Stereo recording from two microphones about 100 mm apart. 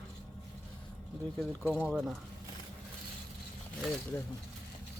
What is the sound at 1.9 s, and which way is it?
Speech, 5° right (ahead or behind).